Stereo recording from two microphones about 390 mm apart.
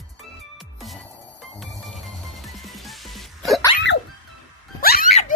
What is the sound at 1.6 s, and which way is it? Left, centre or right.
Music, centre.